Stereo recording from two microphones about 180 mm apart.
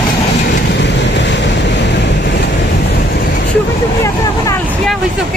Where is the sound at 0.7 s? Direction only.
75° left (ahead or behind).